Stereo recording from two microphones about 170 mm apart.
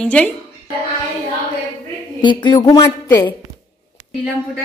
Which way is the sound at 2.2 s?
25° left (ahead or behind).